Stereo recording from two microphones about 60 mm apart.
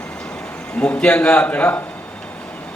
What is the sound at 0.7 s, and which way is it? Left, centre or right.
A man's voice, left.